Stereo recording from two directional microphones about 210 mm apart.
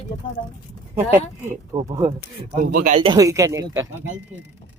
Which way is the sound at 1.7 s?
20° right (ahead or behind).